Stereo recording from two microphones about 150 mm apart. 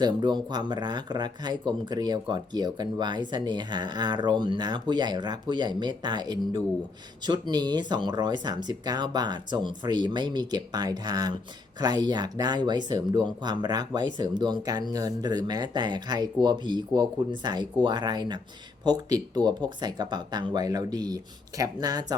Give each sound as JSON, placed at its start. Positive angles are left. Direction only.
{"t": 0.0, "sound": "speech", "side_deg": -30}